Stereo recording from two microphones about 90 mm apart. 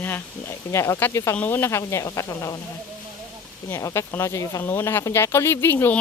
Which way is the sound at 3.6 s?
30° left (ahead or behind).